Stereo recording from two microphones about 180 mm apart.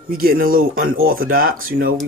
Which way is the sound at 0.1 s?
55° right (ahead or behind).